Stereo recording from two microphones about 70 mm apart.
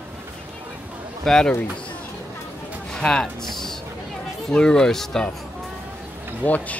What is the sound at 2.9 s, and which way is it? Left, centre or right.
Speech, centre.